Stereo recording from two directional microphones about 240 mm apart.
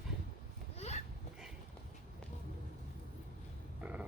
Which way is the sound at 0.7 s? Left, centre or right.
Left.